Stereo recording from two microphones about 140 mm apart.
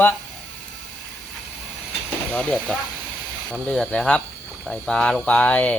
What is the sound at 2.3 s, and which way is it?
Speech, 5° left (ahead or behind).